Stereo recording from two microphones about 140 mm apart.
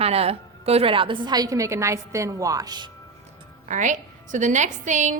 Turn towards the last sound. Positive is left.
turn(degrees=-60)  # may be behind; listen again after turning